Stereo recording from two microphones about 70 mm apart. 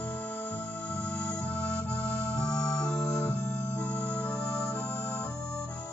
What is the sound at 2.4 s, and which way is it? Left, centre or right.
Music, centre.